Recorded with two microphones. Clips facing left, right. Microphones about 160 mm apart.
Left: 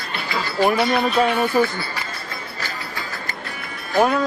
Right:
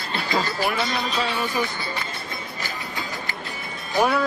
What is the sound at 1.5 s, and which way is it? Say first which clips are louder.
Speech: left 8 dB; 45° left (ahead or behind).